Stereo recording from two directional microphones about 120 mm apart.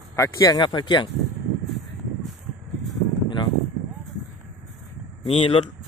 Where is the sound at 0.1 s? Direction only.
30° left (ahead or behind).